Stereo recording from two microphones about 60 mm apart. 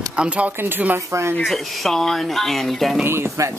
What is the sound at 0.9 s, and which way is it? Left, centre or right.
Speech, right.